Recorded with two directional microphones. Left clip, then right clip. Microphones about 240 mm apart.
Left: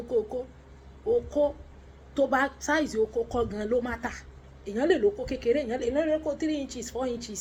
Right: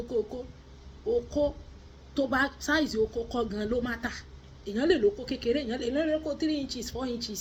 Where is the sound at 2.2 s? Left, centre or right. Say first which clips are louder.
Left 3 dB; centre.